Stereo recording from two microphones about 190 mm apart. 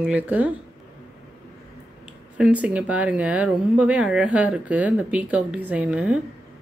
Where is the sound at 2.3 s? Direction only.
5° right (ahead or behind).